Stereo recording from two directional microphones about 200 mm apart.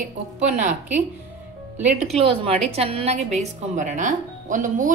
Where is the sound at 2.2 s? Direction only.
30° right (ahead or behind).